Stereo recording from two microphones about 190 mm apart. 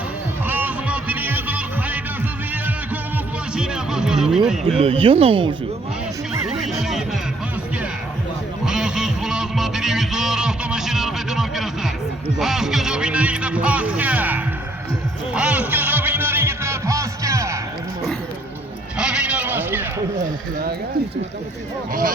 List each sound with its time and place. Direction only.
0.4 s music: 10° right (ahead or behind)
3.5 s music: 5° right (ahead or behind)
4.8 s speech: 30° right (ahead or behind)
8.6 s music: 5° right (ahead or behind)
12.4 s speech: centre (ahead or behind)
15.3 s music: 5° right (ahead or behind)
18.9 s a sound: 5° right (ahead or behind)